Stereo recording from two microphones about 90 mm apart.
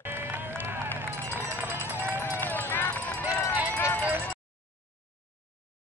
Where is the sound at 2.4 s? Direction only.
20° left (ahead or behind).